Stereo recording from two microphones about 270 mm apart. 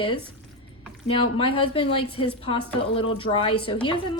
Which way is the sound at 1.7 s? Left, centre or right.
Centre.